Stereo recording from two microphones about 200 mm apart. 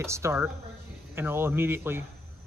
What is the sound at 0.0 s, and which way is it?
Speech, 15° right (ahead or behind).